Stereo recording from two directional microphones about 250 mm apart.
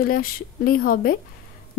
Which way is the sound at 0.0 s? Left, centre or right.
Left.